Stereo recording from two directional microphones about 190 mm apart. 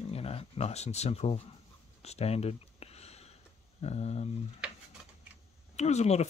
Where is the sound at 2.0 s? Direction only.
35° left (ahead or behind).